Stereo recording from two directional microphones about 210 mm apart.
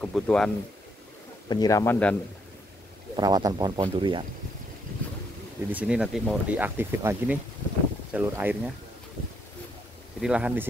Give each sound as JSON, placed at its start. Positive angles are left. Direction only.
{"t": 0.0, "sound": "speech", "side_deg": 5}
{"t": 1.5, "sound": "a man's voice", "side_deg": 15}
{"t": 3.2, "sound": "speech", "side_deg": -20}
{"t": 5.7, "sound": "speech", "side_deg": -5}
{"t": 10.2, "sound": "speech", "side_deg": -5}